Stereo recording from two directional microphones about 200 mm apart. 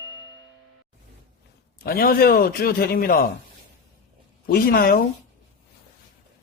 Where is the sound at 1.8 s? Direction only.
50° left (ahead or behind).